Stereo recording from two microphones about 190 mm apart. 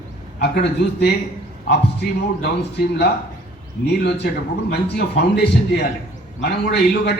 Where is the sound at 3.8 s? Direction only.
60° left (ahead or behind).